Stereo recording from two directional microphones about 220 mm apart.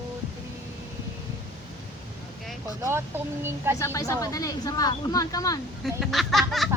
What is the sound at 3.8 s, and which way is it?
Speech, 15° left (ahead or behind).